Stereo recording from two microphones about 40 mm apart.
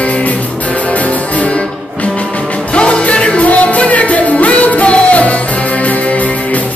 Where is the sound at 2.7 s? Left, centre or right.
Left.